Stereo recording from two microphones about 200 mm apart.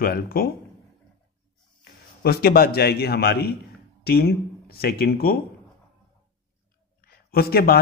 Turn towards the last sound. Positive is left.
turn(degrees=50)  # may be behind; listen again after turning